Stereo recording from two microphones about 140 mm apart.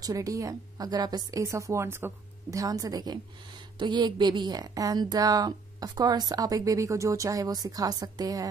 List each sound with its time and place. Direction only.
0.0 s a woman's voice: 25° right (ahead or behind)